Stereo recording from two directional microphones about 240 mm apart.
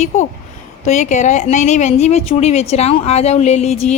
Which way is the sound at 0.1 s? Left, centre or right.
Left.